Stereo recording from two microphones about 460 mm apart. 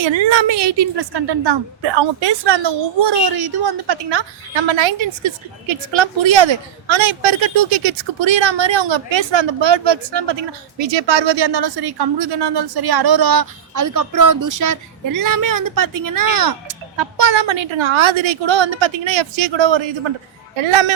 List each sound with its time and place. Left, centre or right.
0.0 s a woman's voice: right
20.6 s speech: right